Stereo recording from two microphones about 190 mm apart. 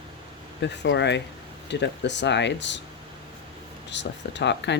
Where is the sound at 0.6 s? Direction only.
65° left (ahead or behind).